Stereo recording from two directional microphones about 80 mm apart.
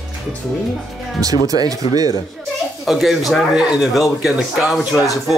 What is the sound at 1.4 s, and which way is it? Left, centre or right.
Speech, right.